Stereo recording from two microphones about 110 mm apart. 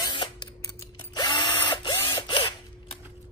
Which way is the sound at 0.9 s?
40° left (ahead or behind).